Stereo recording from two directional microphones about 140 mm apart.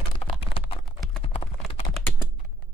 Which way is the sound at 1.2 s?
45° left (ahead or behind).